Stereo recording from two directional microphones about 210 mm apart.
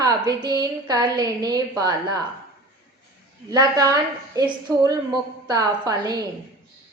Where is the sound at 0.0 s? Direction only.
20° right (ahead or behind).